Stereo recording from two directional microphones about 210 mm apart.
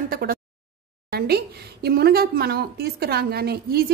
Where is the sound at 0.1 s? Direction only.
45° right (ahead or behind).